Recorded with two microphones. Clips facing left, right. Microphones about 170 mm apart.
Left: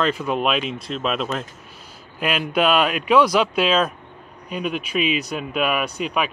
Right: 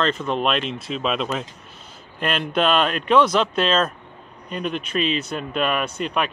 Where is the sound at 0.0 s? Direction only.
5° left (ahead or behind).